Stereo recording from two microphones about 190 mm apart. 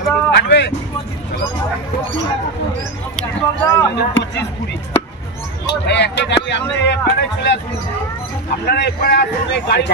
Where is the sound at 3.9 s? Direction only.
65° left (ahead or behind).